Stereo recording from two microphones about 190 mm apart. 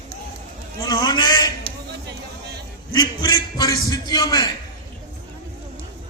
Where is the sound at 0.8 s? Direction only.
20° left (ahead or behind).